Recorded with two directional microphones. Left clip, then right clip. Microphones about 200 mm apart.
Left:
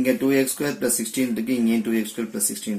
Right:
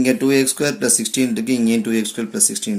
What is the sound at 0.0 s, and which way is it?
Speech, 50° right (ahead or behind).